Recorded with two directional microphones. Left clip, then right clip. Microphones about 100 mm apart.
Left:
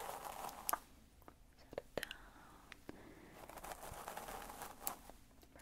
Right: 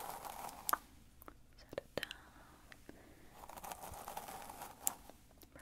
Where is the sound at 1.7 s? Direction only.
40° right (ahead or behind).